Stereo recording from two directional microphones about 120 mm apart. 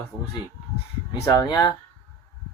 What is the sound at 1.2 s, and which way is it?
Speech, 30° left (ahead or behind).